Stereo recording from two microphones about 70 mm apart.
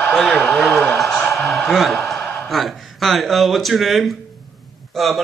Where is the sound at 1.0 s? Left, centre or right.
Centre.